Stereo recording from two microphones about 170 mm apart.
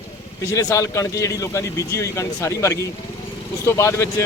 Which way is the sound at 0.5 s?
20° left (ahead or behind).